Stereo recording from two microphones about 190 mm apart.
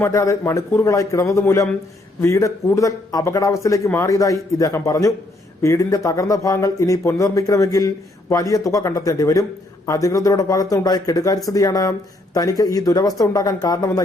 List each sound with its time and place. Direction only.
0.0 s speech: 15° left (ahead or behind)